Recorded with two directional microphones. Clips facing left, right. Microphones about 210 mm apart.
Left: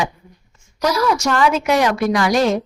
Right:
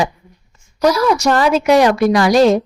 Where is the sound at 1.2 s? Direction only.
35° right (ahead or behind).